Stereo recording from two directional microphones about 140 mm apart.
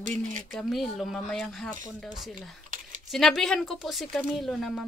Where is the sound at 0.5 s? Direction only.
Centre (ahead or behind).